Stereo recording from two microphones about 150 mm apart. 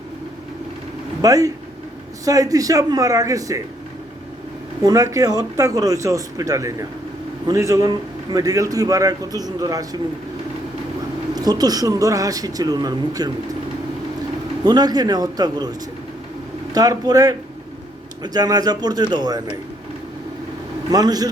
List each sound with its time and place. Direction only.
1.2 s a man's voice: 25° right (ahead or behind)
4.8 s a man's voice: 25° right (ahead or behind)
11.3 s a man's voice: 25° right (ahead or behind)
14.6 s a man's voice: 25° right (ahead or behind)
16.7 s a man's voice: 25° right (ahead or behind)
20.9 s a man's voice: 25° right (ahead or behind)